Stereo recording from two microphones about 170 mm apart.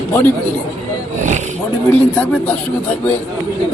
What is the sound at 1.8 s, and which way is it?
A man's voice, 10° left (ahead or behind).